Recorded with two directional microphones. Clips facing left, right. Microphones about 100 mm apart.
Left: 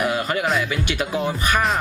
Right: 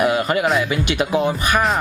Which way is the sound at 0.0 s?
15° right (ahead or behind).